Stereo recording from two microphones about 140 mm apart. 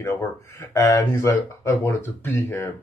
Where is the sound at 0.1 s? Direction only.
15° left (ahead or behind).